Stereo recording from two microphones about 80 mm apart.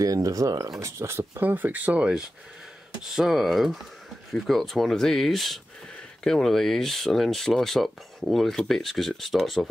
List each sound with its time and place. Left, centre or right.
0.0 s speech: right; by 9.7 s centre